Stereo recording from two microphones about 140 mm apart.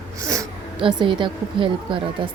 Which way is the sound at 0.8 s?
35° right (ahead or behind).